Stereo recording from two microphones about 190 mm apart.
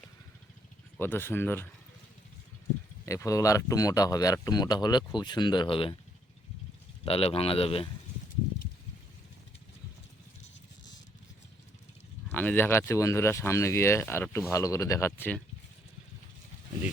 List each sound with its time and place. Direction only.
0.9 s speech: 10° left (ahead or behind)
3.1 s speech: 15° left (ahead or behind)
7.0 s speech: 30° left (ahead or behind)
12.3 s speech: 10° left (ahead or behind)